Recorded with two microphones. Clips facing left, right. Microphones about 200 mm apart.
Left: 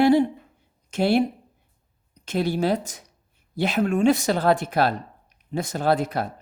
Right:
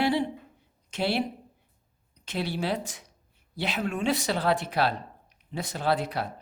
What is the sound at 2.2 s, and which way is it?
Speech, 45° left (ahead or behind).